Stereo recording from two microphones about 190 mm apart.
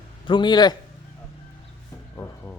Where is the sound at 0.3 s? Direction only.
25° left (ahead or behind).